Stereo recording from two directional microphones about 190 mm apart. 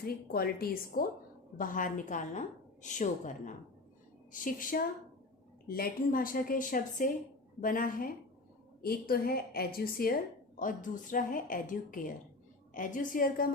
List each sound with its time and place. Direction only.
0.0 s a woman's voice: 50° left (ahead or behind)